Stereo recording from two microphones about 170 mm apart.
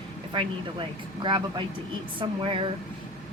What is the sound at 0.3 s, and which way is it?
Speech, 30° right (ahead or behind).